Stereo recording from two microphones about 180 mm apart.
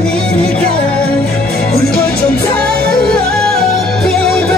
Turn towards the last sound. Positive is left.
turn(degrees=0)  # may be behind; listen again after turning